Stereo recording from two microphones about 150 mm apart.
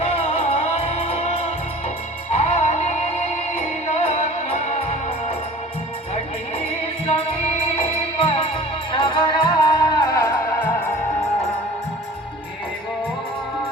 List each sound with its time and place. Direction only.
0.0 s music: 45° left (ahead or behind)
2.3 s music: 45° left (ahead or behind)
7.8 s music: 35° left (ahead or behind); by 10.7 s 20° left (ahead or behind)